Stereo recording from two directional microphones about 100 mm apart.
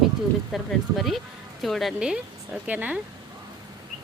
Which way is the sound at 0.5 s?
Centre (ahead or behind).